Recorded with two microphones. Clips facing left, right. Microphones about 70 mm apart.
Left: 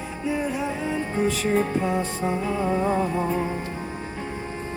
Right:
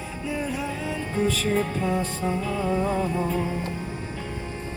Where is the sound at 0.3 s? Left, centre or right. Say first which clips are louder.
Left 1 dB; left.